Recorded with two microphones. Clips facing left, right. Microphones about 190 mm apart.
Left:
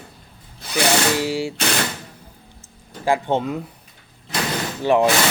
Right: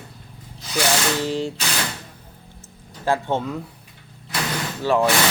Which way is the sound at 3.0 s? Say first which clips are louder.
Left 2 dB; 15° left (ahead or behind).